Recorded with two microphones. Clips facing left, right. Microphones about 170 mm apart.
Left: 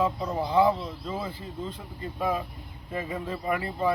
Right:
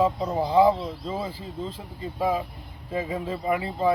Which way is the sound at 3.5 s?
25° right (ahead or behind).